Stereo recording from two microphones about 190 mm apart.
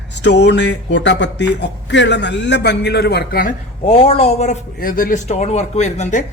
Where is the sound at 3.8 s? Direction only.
30° left (ahead or behind).